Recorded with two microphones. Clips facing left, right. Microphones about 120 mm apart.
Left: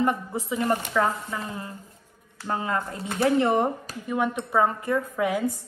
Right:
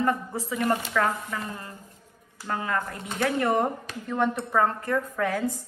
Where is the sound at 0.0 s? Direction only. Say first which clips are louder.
Left 1 dB; 20° left (ahead or behind).